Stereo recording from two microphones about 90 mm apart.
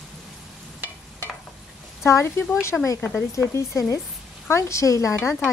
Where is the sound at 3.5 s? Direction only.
35° left (ahead or behind).